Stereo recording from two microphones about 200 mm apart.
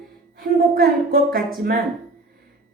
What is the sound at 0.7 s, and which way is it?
A woman's voice, 50° right (ahead or behind).